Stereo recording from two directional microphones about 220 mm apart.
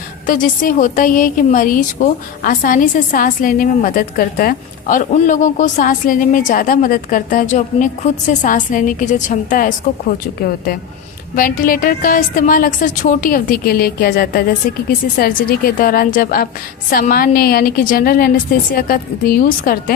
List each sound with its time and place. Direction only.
0.3 s a woman's voice: 40° left (ahead or behind)
11.3 s a woman's voice: 40° left (ahead or behind)